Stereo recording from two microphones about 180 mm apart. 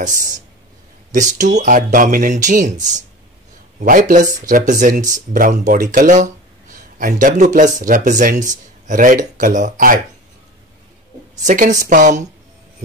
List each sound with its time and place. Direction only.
0.0 s speech: 50° right (ahead or behind)
3.8 s speech: 45° right (ahead or behind)
11.4 s speech: 45° right (ahead or behind)